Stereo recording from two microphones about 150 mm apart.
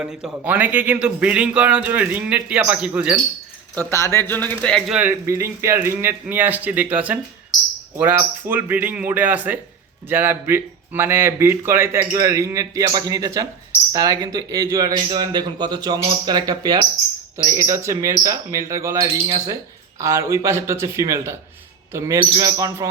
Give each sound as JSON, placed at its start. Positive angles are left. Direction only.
{"t": 0.0, "sound": "speech", "side_deg": -5}
{"t": 3.8, "sound": "speech", "side_deg": 20}
{"t": 4.9, "sound": "a man's voice", "side_deg": -15}